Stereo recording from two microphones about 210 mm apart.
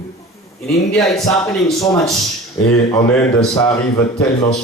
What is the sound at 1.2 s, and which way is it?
Speech, 15° left (ahead or behind).